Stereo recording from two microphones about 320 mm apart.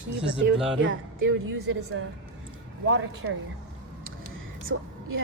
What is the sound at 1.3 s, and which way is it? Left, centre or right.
Speech, right.